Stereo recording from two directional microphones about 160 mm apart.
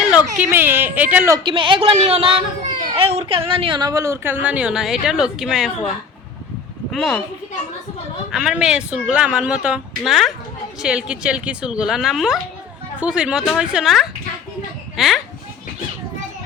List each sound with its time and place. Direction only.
0.1 s speech: 10° right (ahead or behind)
1.5 s speech: 30° right (ahead or behind); by 5.7 s 5° right (ahead or behind)
6.9 s speech: centre (ahead or behind)
8.3 s a child's voice: 5° right (ahead or behind)